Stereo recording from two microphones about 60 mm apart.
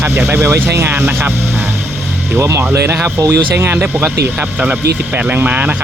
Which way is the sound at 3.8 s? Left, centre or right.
Right.